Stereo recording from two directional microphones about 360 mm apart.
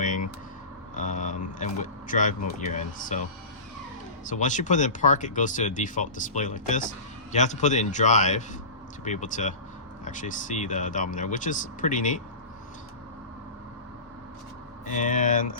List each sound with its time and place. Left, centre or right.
0.9 s a sound: left
4.3 s speech: left
14.8 s speech: left